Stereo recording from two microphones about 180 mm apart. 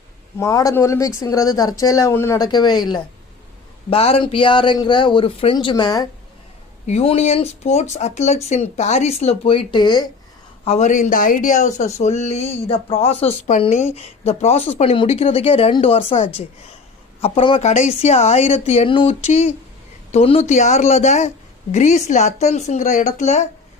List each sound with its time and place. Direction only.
0.3 s speech: 15° left (ahead or behind)
6.8 s speech: 35° left (ahead or behind)
10.7 s speech: 40° left (ahead or behind)